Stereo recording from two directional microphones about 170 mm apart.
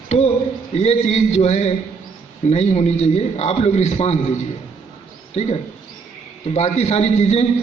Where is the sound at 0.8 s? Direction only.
40° left (ahead or behind).